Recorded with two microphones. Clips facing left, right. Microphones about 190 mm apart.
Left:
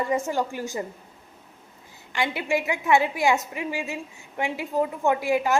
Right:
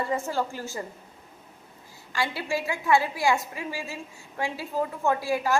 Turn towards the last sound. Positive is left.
turn(degrees=20)  # may be behind; listen again after turning